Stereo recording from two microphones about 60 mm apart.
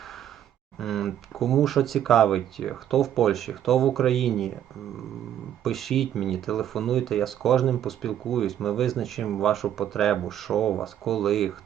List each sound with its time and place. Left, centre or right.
0.8 s speech: centre
5.6 s speech: centre